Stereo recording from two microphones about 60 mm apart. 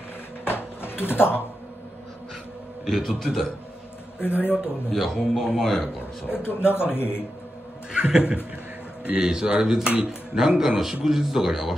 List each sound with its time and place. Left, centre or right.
0.5 s a sound: left
2.8 s a man's voice: centre
4.2 s speech: left
4.6 s speech: centre
6.2 s speech: left
7.9 s a sound: centre
9.0 s speech: centre